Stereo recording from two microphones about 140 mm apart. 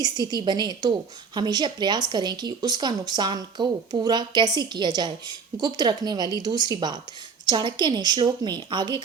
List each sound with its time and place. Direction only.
0.0 s a woman's voice: 30° right (ahead or behind)